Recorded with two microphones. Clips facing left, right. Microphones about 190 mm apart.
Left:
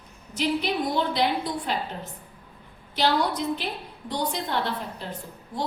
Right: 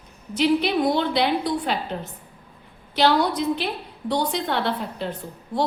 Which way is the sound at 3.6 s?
70° right (ahead or behind).